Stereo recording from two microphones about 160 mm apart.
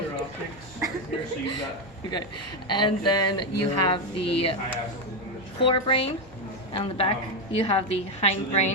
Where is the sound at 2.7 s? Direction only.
30° left (ahead or behind).